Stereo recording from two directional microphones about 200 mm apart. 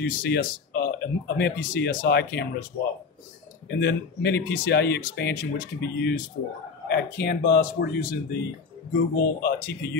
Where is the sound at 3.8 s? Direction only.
60° left (ahead or behind).